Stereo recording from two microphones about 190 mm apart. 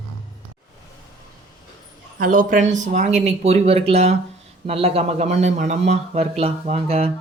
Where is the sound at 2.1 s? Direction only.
45° right (ahead or behind).